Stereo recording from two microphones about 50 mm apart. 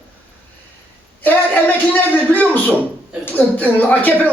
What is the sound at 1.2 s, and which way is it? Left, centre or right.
A woman's voice, left.